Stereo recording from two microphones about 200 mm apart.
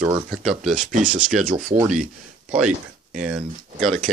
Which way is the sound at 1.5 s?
40° right (ahead or behind).